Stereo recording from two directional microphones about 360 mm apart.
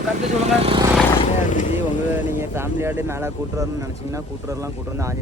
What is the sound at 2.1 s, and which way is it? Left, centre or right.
Speech, centre.